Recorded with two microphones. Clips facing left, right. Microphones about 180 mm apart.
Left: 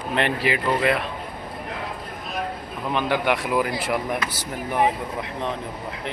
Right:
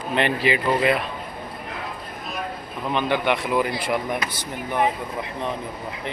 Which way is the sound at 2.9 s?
5° left (ahead or behind).